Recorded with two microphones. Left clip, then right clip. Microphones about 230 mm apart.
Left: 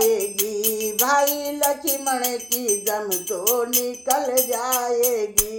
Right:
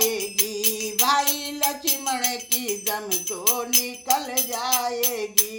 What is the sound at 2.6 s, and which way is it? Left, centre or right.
Music, centre.